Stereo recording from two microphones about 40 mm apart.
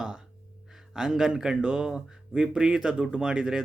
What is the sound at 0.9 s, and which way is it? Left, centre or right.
Speech, centre.